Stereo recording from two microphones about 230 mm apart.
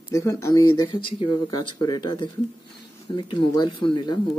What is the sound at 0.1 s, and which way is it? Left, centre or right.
Speech, centre.